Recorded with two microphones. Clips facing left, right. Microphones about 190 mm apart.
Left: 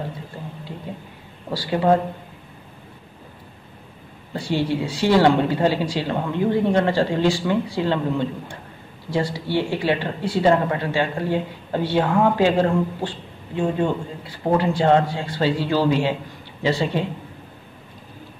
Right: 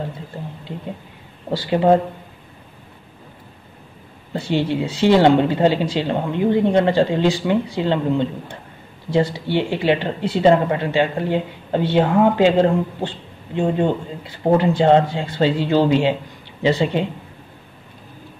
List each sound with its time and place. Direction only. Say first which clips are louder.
1.5 s speech: right 3 dB; 25° right (ahead or behind)
4.3 s speech: right 2 dB; 20° right (ahead or behind)